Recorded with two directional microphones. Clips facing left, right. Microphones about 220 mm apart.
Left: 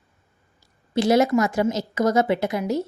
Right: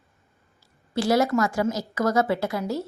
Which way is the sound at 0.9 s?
20° left (ahead or behind).